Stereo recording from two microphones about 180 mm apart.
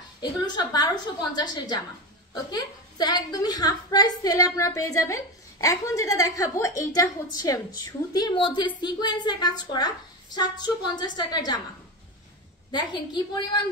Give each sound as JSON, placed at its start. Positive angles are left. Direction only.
{"t": 0.2, "sound": "a woman's voice", "side_deg": 20}
{"t": 12.7, "sound": "a woman's voice", "side_deg": 25}